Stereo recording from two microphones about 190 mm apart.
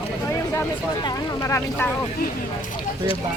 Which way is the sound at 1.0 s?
15° left (ahead or behind).